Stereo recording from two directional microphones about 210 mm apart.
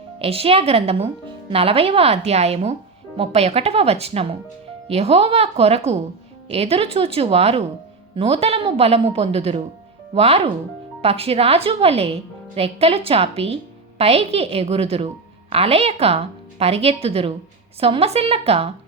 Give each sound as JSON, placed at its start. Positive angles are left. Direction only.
{"t": 0.2, "sound": "a woman's voice", "side_deg": -30}